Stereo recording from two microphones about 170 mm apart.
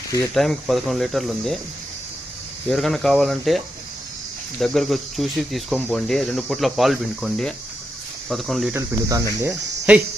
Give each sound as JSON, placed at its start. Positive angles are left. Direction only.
{"t": 0.3, "sound": "speech", "side_deg": 0}
{"t": 2.6, "sound": "speech", "side_deg": 0}
{"t": 4.6, "sound": "speech", "side_deg": 0}
{"t": 8.7, "sound": "cricket", "side_deg": -20}